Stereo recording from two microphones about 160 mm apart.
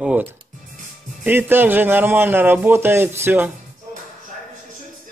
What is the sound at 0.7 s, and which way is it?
Music, 50° right (ahead or behind).